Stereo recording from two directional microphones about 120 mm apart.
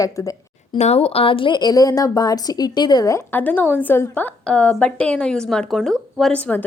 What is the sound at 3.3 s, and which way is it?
Speech, 15° left (ahead or behind).